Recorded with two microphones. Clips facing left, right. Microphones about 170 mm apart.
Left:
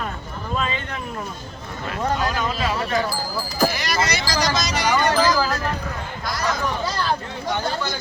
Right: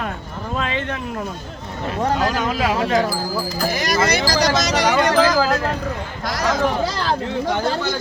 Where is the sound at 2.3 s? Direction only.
70° right (ahead or behind); by 3.0 s 90° right.